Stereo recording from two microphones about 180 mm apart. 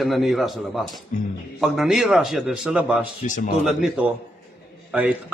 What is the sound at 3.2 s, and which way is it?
Speech, 45° left (ahead or behind).